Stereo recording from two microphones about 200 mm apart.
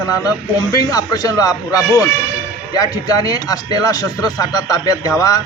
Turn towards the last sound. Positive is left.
turn(degrees=20)  # may be behind; listen again after turning